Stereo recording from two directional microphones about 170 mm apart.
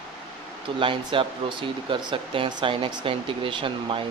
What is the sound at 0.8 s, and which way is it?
Speech, 30° right (ahead or behind).